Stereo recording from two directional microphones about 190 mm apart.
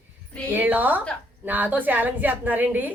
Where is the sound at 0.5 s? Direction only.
10° right (ahead or behind).